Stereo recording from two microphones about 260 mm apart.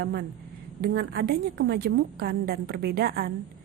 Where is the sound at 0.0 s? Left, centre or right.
Right.